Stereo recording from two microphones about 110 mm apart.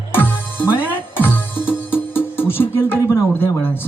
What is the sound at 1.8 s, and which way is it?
Music, 20° left (ahead or behind).